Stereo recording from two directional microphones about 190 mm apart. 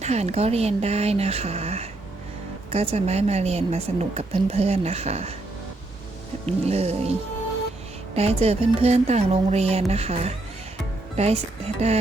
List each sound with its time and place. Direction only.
0.0 s a woman's voice: 35° right (ahead or behind)
6.4 s a woman's voice: 35° right (ahead or behind)
8.1 s a woman's voice: 35° right (ahead or behind)